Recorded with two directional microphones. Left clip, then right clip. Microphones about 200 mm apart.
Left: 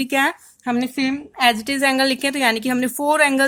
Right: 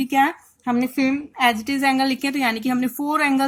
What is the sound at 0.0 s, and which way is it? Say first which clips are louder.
A woman's voice: even; 40° left (ahead or behind).